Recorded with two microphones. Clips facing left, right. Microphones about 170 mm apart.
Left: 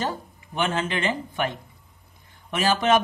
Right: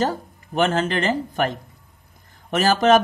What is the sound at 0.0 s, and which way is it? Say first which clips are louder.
Speech: right 6 dB; 40° right (ahead or behind).